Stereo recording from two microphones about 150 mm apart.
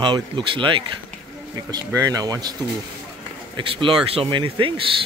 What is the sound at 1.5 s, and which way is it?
Speech, 20° right (ahead or behind).